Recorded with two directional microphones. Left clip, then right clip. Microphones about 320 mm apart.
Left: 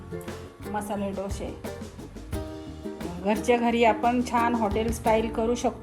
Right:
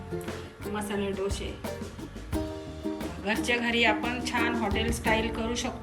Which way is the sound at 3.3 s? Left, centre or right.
Centre.